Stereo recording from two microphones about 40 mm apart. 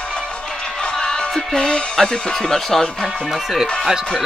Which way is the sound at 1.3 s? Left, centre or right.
Centre.